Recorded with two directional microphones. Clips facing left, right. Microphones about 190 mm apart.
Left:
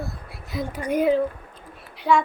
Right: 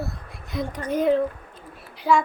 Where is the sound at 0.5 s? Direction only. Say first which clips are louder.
Left 1 dB; 5° left (ahead or behind).